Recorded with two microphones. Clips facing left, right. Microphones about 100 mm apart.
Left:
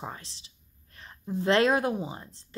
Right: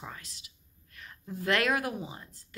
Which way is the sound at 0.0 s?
30° left (ahead or behind).